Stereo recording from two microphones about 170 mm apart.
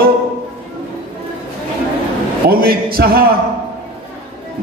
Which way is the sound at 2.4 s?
60° right (ahead or behind).